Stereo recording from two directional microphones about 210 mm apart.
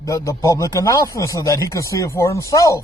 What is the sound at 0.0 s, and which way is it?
Speech, 15° left (ahead or behind).